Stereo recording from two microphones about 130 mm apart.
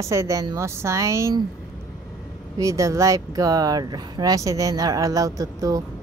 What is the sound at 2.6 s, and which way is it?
Speech, 25° right (ahead or behind).